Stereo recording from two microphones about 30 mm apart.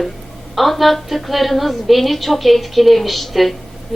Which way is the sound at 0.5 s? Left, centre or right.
Centre.